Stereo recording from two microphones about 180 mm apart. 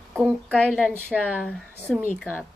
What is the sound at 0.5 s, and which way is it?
Speech, 5° left (ahead or behind).